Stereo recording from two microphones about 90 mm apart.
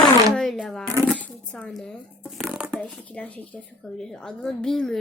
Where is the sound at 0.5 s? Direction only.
5° left (ahead or behind).